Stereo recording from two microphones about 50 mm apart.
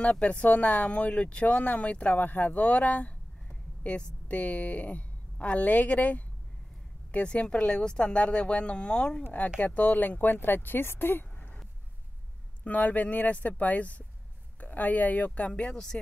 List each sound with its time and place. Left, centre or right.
0.0 s a woman's voice: left
9.2 s speech: left
12.6 s speech: left
15.7 s speech: centre